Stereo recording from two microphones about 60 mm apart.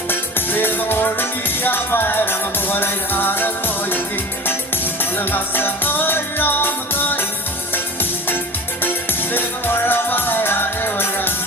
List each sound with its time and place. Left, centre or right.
0.1 s music: left
5.1 s music: left
9.3 s music: left